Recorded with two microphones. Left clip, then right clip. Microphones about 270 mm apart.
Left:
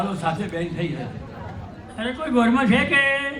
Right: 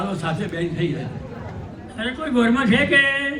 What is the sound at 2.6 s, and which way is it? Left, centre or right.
Speech, right.